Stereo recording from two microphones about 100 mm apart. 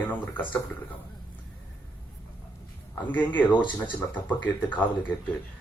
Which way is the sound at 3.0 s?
15° left (ahead or behind).